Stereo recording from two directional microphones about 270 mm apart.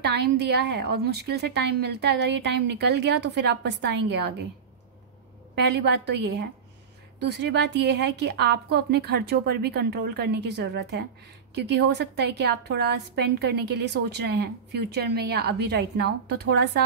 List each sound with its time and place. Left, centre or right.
0.0 s a woman's voice: right
5.6 s a woman's voice: right